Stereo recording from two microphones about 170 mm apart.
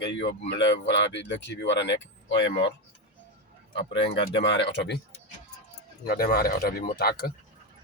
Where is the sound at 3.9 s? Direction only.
90° left.